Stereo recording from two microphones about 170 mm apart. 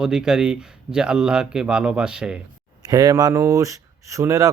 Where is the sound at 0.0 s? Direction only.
5° right (ahead or behind).